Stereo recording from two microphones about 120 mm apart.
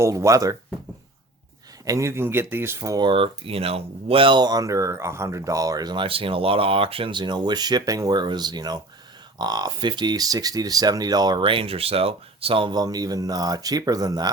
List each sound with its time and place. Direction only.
0.0 s speech: 25° right (ahead or behind)
1.8 s speech: 25° right (ahead or behind)
3.0 s speech: 50° right (ahead or behind); by 14.3 s 30° right (ahead or behind)